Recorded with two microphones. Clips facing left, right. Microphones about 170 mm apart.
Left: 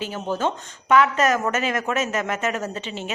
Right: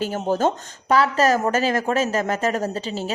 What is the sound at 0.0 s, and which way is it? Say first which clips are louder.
Speech: right 4 dB; 40° right (ahead or behind).